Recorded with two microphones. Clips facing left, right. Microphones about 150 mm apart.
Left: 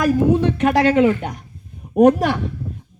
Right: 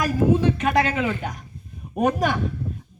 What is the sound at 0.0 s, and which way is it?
Speech, 65° left (ahead or behind).